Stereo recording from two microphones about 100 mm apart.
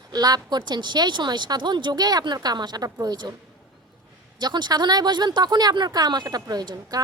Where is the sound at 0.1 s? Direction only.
40° right (ahead or behind).